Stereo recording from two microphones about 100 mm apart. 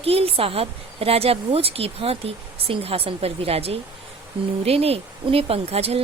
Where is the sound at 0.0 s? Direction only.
75° right (ahead or behind).